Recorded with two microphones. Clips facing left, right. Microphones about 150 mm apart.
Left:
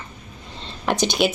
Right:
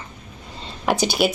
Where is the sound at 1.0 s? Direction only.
5° right (ahead or behind).